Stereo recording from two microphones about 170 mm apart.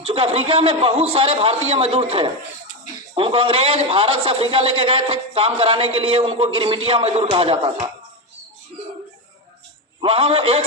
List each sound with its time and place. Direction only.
0.0 s a man's voice: 35° right (ahead or behind)
10.0 s a man's voice: 30° right (ahead or behind)